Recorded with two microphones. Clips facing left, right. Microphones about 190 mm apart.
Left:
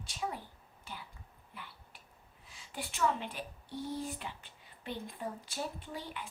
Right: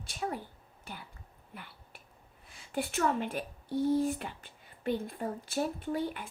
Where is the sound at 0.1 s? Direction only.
55° right (ahead or behind).